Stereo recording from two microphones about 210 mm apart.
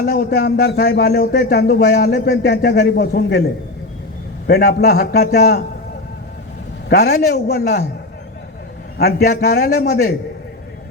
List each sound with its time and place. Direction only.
0.0 s a man's voice: 50° left (ahead or behind)
4.4 s a man's voice: 50° left (ahead or behind)
6.8 s a man's voice: 50° left (ahead or behind)
9.0 s a man's voice: 50° left (ahead or behind)